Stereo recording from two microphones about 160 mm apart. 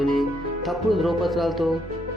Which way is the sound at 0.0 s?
Centre (ahead or behind).